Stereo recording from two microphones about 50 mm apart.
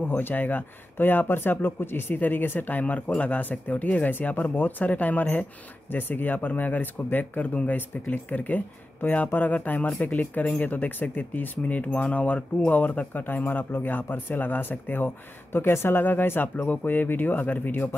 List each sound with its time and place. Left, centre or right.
0.0 s speech: left